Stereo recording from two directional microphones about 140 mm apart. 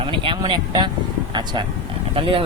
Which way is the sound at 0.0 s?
40° right (ahead or behind).